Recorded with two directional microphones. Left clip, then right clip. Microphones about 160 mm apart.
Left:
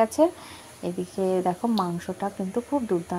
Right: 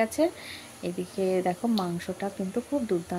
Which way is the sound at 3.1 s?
5° right (ahead or behind).